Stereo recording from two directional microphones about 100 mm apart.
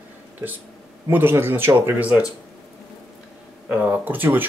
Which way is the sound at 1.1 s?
25° right (ahead or behind).